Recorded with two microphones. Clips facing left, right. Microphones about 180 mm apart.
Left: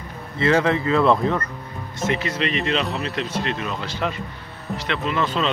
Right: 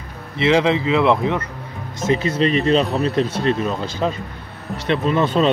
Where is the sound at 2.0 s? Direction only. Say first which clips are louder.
Right 5 dB; 35° right (ahead or behind).